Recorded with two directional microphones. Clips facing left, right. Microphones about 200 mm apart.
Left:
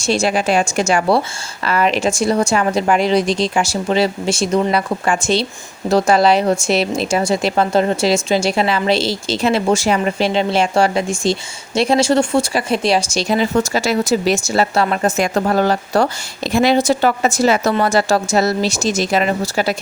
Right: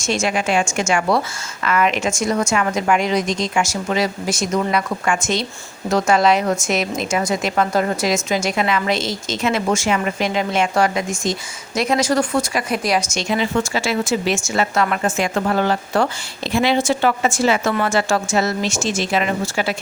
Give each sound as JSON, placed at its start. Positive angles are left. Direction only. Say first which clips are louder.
{"t": 0.0, "sound": "a woman's voice", "louder": "left 4 dB", "side_deg": 35}